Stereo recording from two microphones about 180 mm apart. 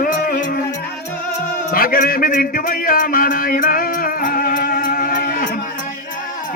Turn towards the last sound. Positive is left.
turn(degrees=50)  # may be behind; listen again after turning